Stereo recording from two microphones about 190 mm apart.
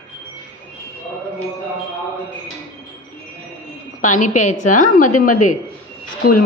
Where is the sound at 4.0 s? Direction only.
40° left (ahead or behind).